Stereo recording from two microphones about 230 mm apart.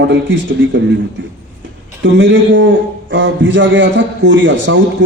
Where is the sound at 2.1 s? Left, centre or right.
Right.